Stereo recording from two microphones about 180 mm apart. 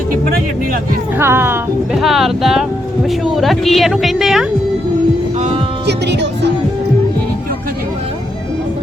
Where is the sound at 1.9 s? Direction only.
Centre (ahead or behind).